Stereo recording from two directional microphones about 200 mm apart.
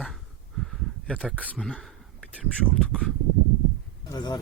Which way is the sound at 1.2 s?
5° right (ahead or behind).